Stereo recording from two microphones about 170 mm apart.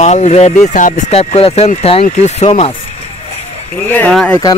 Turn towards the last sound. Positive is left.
turn(degrees=5)  # may be behind; listen again after turning